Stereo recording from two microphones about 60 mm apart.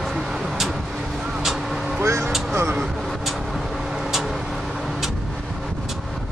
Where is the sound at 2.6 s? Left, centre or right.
Right.